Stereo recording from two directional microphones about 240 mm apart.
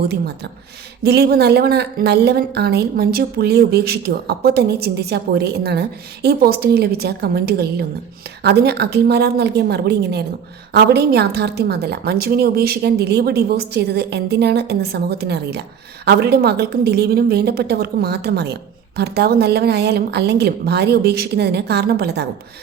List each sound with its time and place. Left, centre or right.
1.0 s a woman's voice: right